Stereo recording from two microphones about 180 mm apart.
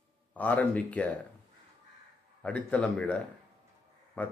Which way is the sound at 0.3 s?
10° left (ahead or behind).